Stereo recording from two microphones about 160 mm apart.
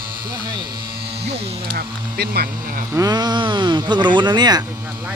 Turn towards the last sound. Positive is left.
turn(degrees=-25)  # may be behind; listen again after turning